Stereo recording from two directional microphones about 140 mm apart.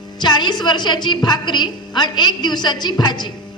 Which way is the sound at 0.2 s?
30° left (ahead or behind).